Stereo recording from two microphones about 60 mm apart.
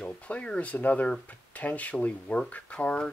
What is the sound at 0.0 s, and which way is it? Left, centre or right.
Speech, centre.